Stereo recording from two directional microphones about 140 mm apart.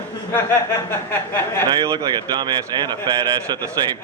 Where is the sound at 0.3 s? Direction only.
15° left (ahead or behind).